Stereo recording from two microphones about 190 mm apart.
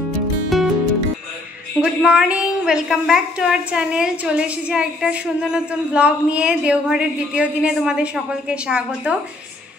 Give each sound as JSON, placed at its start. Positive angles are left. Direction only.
{"t": 0.5, "sound": "music", "side_deg": 0}
{"t": 1.8, "sound": "a woman's voice", "side_deg": -5}